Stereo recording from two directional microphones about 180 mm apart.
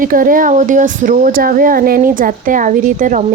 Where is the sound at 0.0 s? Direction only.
50° right (ahead or behind).